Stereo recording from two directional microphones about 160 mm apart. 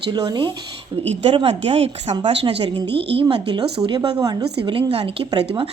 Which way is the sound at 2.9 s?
90° right.